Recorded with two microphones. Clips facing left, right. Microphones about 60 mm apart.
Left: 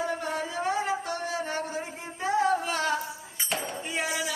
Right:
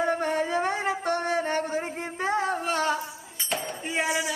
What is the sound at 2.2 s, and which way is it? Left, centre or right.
Singing, right.